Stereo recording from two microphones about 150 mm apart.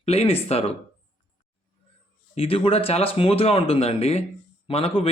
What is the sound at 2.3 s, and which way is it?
Speech, 40° left (ahead or behind).